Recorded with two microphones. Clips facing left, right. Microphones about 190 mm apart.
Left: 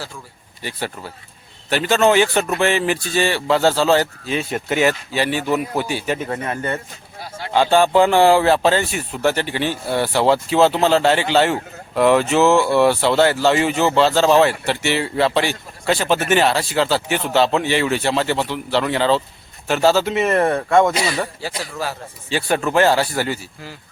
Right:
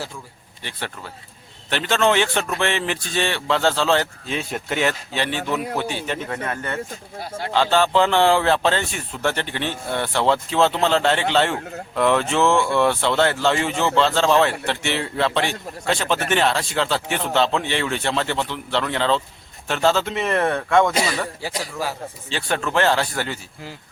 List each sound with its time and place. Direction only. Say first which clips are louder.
0.6 s a man's voice: left 5 dB; 10° left (ahead or behind)
21.6 s a man's voice: left 1 dB; 15° right (ahead or behind)
22.3 s a man's voice: left 5 dB; 10° left (ahead or behind)